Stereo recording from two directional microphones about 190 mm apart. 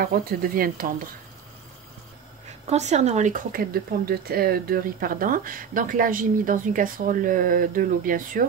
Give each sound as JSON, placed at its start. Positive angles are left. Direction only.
{"t": 0.0, "sound": "speech", "side_deg": -50}
{"t": 2.6, "sound": "speech", "side_deg": -35}